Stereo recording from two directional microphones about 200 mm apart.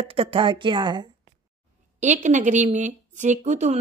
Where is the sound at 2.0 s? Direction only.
35° right (ahead or behind).